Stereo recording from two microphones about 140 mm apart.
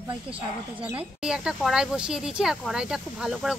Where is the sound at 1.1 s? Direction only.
5° right (ahead or behind).